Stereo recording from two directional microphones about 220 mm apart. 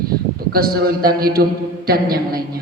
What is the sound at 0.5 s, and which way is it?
A man's voice, 45° right (ahead or behind).